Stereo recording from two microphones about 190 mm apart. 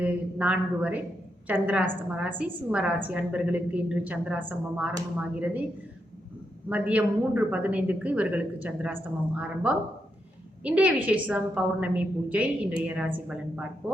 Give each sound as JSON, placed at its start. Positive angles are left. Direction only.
{"t": 0.0, "sound": "a woman's voice", "side_deg": -5}
{"t": 6.7, "sound": "a woman's voice", "side_deg": -10}